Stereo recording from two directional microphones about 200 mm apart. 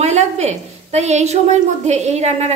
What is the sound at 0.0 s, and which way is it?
A woman's voice, 35° right (ahead or behind).